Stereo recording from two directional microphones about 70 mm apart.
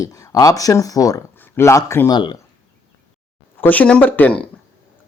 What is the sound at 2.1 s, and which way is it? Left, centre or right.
Speech, left.